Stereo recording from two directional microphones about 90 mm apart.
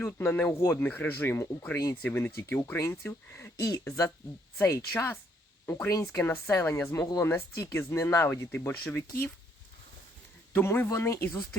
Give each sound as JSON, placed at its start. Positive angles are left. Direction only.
{"t": 0.0, "sound": "speech", "side_deg": 20}
{"t": 0.8, "sound": "speech", "side_deg": 20}
{"t": 10.5, "sound": "speech", "side_deg": 25}